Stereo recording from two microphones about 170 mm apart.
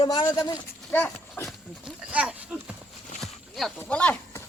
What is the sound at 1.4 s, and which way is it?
Wild animals, 5° right (ahead or behind).